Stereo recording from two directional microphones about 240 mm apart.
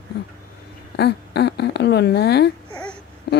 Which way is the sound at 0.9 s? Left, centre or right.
Left.